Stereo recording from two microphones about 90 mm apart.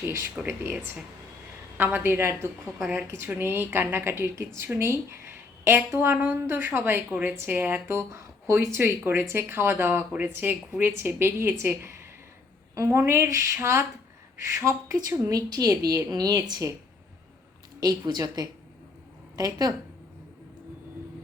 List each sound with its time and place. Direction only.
0.0 s a woman's voice: 30° right (ahead or behind)
1.8 s a woman's voice: 20° right (ahead or behind)
15.3 s a woman's voice: 45° right (ahead or behind)
17.7 s a woman's voice: 50° right (ahead or behind)